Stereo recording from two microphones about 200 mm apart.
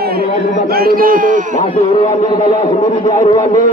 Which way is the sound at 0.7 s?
50° right (ahead or behind).